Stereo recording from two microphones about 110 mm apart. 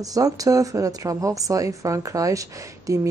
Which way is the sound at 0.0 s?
35° right (ahead or behind).